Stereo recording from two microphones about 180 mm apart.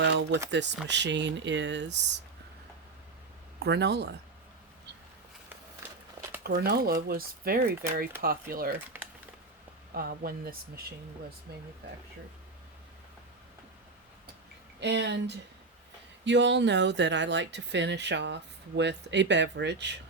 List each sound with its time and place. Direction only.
0.5 s speech: 75° right (ahead or behind)
3.6 s speech: 65° right (ahead or behind)
6.4 s speech: 60° right (ahead or behind)
9.9 s speech: 55° right (ahead or behind)
14.8 s speech: 75° right (ahead or behind)